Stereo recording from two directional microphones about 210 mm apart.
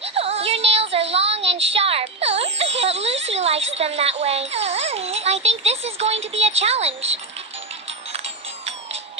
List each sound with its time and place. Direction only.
0.0 s child singing: 30° right (ahead or behind)